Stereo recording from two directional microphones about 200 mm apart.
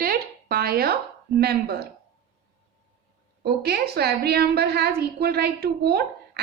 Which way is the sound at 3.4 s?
55° right (ahead or behind).